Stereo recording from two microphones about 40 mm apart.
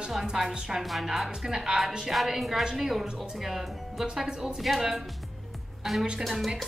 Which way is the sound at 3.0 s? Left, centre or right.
Right.